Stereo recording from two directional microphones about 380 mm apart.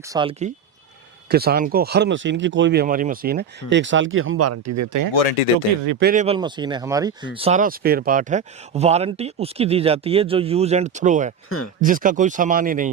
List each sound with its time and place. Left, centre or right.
0.1 s speech: centre; by 5.1 s right
6.0 s speech: right
11.4 s speech: left
11.8 s speech: right